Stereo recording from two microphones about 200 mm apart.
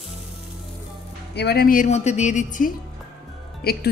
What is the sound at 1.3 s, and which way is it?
A woman's voice, 55° left (ahead or behind).